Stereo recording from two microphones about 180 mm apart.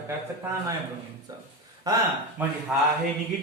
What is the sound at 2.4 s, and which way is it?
Speech, 10° right (ahead or behind).